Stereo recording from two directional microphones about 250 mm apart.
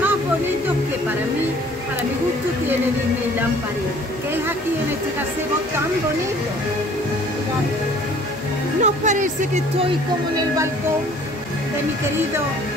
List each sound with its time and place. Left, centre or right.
8.8 s speech: right